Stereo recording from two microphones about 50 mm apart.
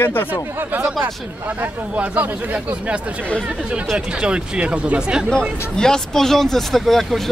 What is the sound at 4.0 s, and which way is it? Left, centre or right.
Speech, centre.